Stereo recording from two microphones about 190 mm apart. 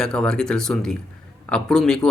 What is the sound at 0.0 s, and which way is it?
Speech, 5° left (ahead or behind).